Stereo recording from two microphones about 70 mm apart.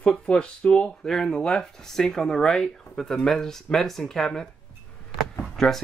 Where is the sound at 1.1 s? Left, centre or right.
Centre.